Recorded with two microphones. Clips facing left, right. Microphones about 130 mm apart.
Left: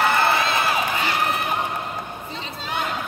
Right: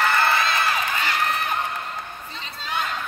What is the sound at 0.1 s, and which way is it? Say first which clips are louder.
Crowd: left 1 dB; 15° left (ahead or behind).